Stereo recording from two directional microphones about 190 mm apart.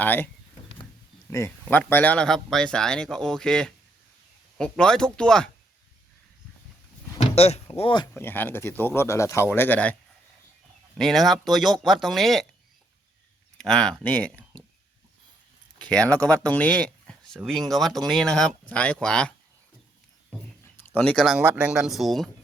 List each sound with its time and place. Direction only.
0.0 s speech: 10° left (ahead or behind)
1.3 s speech: 15° left (ahead or behind)
7.2 s a sound: 30° left (ahead or behind)
8.1 s speech: 10° left (ahead or behind)
10.9 s speech: centre (ahead or behind)
13.6 s speech: 5° left (ahead or behind)
15.8 s speech: 5° left (ahead or behind)
20.9 s speech: 5° left (ahead or behind)